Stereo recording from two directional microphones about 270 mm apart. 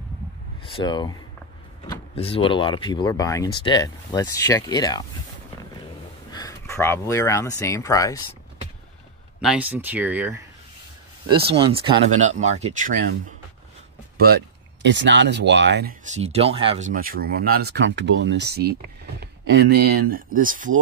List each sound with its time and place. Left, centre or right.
0.7 s speech: centre
6.3 s speech: centre
9.4 s speech: centre
11.2 s speech: centre
14.1 s speech: right